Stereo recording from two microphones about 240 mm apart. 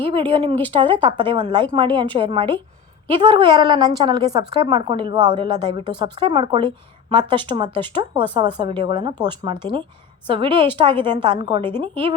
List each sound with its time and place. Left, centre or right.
0.0 s a woman's voice: right